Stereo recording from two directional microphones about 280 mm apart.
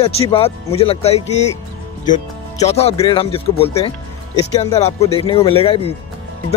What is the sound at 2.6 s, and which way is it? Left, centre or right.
Speech, left.